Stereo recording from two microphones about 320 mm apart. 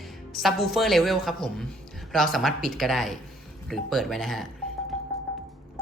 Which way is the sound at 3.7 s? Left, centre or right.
Centre.